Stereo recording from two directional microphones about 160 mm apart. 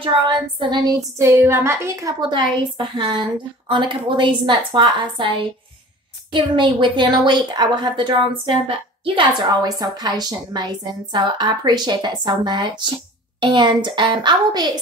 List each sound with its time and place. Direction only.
0.0 s a woman's voice: 30° right (ahead or behind)
6.3 s a woman's voice: 30° right (ahead or behind)